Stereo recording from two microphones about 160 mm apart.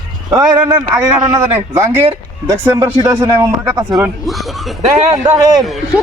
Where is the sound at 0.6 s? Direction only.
10° right (ahead or behind).